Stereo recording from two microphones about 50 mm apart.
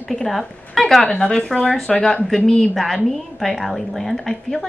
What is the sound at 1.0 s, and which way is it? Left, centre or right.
A woman's voice, centre.